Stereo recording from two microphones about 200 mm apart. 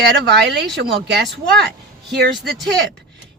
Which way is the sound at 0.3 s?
55° right (ahead or behind).